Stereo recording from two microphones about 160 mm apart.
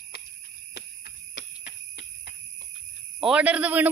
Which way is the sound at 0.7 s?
90° left.